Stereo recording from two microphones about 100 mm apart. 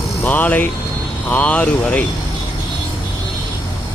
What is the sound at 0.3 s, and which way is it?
Speech, 15° left (ahead or behind).